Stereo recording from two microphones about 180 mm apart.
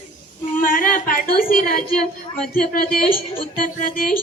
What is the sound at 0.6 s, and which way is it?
A woman's voice, 50° left (ahead or behind).